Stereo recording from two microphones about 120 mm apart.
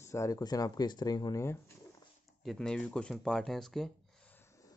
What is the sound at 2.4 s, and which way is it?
Speech, 5° left (ahead or behind).